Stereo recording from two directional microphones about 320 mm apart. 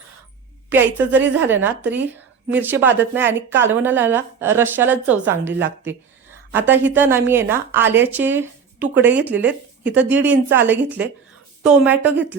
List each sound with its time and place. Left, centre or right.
0.7 s a woman's voice: centre